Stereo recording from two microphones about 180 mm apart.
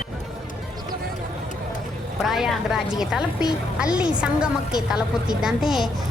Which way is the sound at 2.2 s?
Centre (ahead or behind).